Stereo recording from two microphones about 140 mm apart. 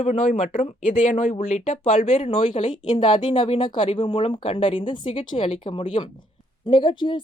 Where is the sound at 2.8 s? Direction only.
35° left (ahead or behind).